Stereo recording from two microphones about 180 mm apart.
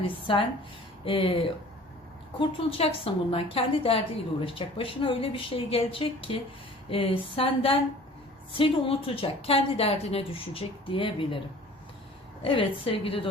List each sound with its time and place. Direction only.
0.0 s a woman's voice: 30° left (ahead or behind)
12.4 s a woman's voice: 30° left (ahead or behind)